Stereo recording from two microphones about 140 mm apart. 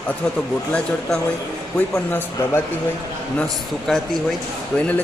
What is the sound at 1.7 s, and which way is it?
Speech, 15° left (ahead or behind).